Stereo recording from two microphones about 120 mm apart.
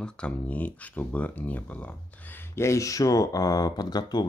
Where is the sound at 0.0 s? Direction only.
10° left (ahead or behind).